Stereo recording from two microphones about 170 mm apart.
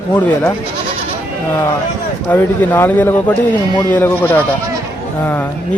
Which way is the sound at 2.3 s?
10° left (ahead or behind).